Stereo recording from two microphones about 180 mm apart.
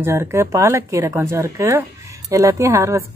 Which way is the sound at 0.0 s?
15° right (ahead or behind).